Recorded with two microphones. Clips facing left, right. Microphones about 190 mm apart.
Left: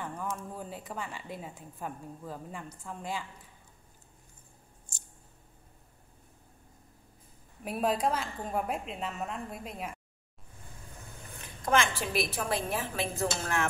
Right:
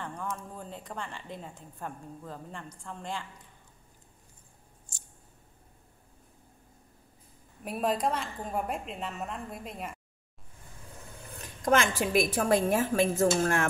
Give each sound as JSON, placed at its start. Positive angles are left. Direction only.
{"t": 0.0, "sound": "a woman's voice", "side_deg": 5}
{"t": 7.6, "sound": "a woman's voice", "side_deg": 0}
{"t": 11.4, "sound": "a woman's voice", "side_deg": -45}